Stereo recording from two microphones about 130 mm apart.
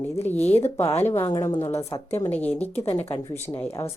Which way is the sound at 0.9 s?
55° left (ahead or behind).